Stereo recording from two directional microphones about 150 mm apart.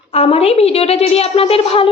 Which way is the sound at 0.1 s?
40° left (ahead or behind).